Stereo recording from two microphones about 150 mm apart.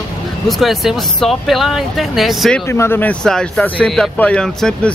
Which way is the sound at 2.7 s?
15° left (ahead or behind).